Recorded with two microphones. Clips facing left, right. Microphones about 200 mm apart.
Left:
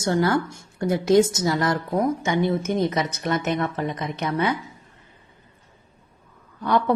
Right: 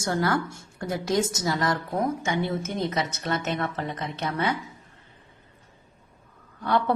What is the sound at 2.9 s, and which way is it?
A woman's voice, 15° left (ahead or behind).